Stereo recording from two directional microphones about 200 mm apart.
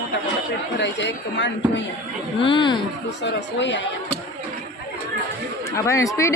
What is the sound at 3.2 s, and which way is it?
Speech, 60° left (ahead or behind).